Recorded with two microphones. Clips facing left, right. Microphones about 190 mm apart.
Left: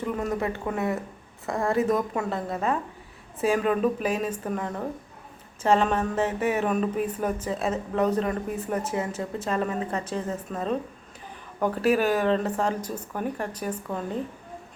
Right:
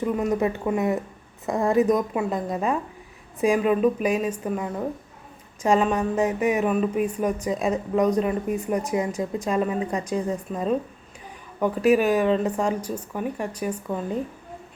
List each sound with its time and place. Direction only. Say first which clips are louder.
0.0 s speech: right 5 dB; 15° right (ahead or behind)